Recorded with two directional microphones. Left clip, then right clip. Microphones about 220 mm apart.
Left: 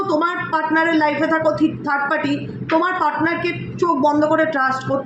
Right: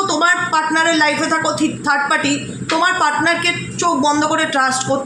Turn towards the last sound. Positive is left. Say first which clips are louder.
# right 1 dB
turn(degrees=-45)  # may be behind; listen again after turning